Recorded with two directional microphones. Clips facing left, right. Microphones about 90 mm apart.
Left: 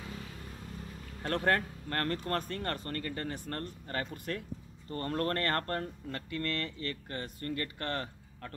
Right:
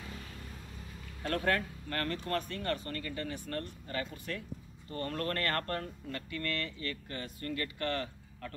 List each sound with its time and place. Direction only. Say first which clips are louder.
1.2 s speech: left 2 dB; 35° left (ahead or behind)